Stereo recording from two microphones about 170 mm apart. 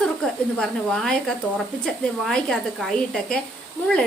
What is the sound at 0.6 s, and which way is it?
Speech, 5° left (ahead or behind).